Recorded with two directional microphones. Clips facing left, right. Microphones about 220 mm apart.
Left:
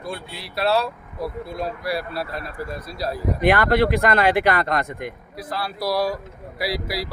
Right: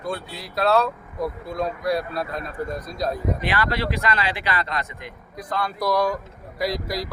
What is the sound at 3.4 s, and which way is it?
Speech, 55° left (ahead or behind).